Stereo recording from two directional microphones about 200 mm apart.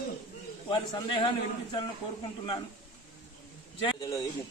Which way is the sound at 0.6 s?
25° left (ahead or behind).